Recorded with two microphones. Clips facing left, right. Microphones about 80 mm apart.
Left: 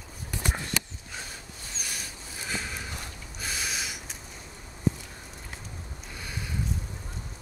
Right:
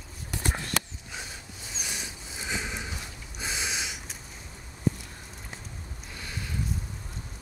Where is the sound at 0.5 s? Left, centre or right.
Centre.